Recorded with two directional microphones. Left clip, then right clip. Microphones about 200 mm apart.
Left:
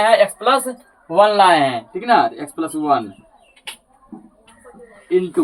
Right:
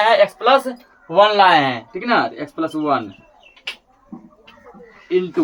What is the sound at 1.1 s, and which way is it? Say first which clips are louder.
Speech: even; 15° right (ahead or behind).